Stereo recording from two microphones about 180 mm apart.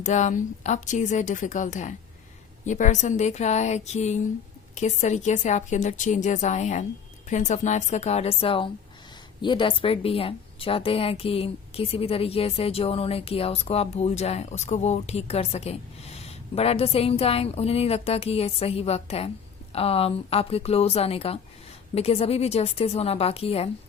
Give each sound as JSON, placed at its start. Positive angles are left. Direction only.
{"t": 0.0, "sound": "a woman's voice", "side_deg": 40}